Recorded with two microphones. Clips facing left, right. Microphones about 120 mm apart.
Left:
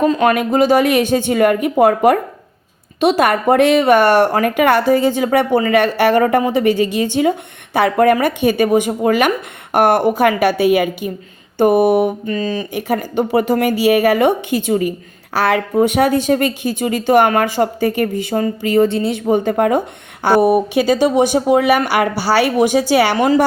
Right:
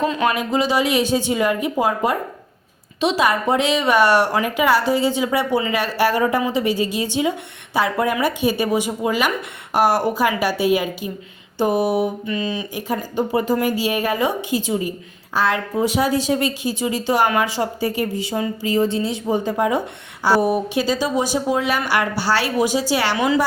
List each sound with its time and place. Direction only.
0.0 s speech: 45° left (ahead or behind); by 2.1 s 65° left (ahead or behind)
3.0 s a woman's voice: 55° left (ahead or behind)
12.7 s a woman's voice: 70° left (ahead or behind); by 23.5 s 45° left (ahead or behind)